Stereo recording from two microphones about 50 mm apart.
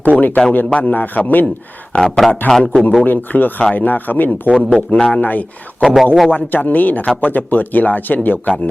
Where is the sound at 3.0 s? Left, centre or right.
Left.